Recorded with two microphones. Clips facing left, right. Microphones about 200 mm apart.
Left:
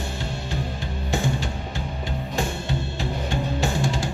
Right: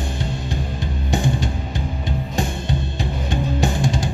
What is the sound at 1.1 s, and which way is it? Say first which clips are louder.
Music: right 4 dB; 15° right (ahead or behind).